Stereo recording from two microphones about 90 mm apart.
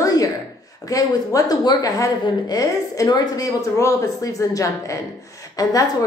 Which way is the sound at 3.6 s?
35° left (ahead or behind).